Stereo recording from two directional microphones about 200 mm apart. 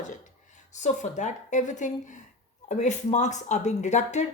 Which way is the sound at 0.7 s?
35° left (ahead or behind).